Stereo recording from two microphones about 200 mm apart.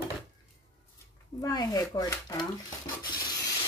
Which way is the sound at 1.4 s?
20° left (ahead or behind).